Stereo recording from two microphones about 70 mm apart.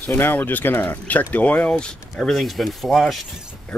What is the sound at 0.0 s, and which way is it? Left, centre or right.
Speech, left.